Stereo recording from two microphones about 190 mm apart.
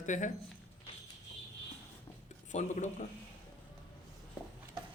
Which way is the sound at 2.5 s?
40° left (ahead or behind).